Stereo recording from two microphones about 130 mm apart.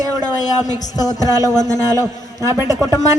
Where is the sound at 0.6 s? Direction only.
30° left (ahead or behind).